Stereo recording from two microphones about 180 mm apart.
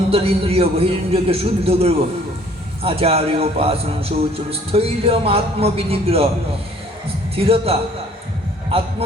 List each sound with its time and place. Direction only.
0.1 s speech: 30° right (ahead or behind)
7.3 s speech: 30° right (ahead or behind)
9.0 s a man's voice: 35° right (ahead or behind)